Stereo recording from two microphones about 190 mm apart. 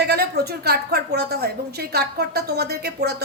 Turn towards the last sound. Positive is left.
turn(degrees=-60)  # may be behind; listen again after turning